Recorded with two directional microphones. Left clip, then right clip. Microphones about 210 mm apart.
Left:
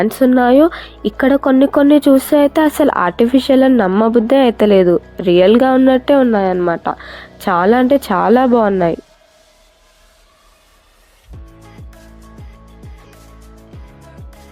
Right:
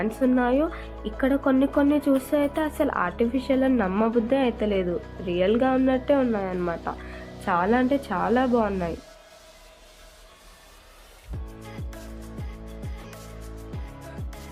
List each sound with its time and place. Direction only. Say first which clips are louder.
0.0 s speech: left 11 dB; 50° left (ahead or behind)